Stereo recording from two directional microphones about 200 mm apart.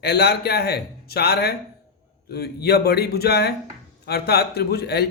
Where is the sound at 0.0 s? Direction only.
55° left (ahead or behind).